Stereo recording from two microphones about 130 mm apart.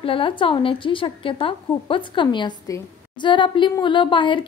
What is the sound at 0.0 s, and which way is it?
A woman's voice, 40° left (ahead or behind).